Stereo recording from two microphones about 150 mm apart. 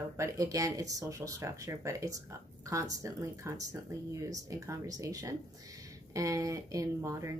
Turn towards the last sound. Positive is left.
turn(degrees=-20)  # may be behind; listen again after turning